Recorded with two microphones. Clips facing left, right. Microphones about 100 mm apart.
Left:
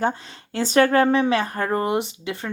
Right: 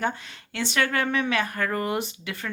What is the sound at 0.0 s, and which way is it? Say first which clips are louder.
Speech: left 5 dB; 30° left (ahead or behind).